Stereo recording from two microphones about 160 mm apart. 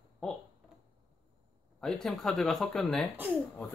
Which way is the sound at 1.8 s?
Centre (ahead or behind).